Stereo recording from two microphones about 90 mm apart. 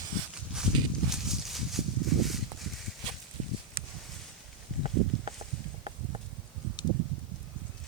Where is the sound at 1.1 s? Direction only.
5° right (ahead or behind).